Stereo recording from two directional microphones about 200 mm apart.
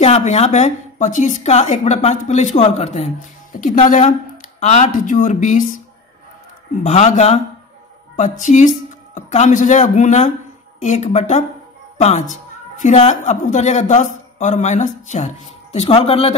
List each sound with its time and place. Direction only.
0.0 s a woman's voice: 35° left (ahead or behind)
6.8 s a woman's voice: 35° left (ahead or behind)